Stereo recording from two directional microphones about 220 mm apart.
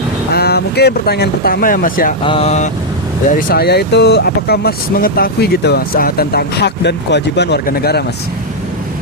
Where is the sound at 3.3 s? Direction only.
45° left (ahead or behind).